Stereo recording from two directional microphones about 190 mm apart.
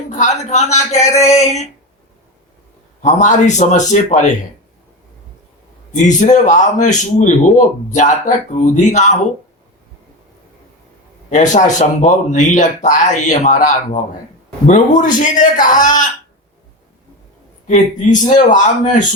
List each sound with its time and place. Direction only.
0.1 s speech: 40° left (ahead or behind)
3.0 s a man's voice: 40° left (ahead or behind)
5.9 s a man's voice: 40° left (ahead or behind)
11.3 s a man's voice: 40° left (ahead or behind)
17.7 s a man's voice: 40° left (ahead or behind)